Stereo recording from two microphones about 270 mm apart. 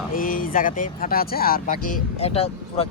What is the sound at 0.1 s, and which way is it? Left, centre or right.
A man's voice, left.